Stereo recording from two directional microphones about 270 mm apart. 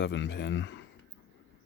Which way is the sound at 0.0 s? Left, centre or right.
Left.